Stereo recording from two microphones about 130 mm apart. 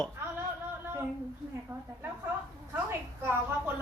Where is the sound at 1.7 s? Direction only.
25° right (ahead or behind).